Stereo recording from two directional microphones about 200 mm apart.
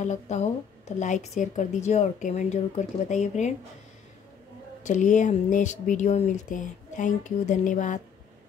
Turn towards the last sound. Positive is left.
turn(degrees=40)  # may be behind; listen again after turning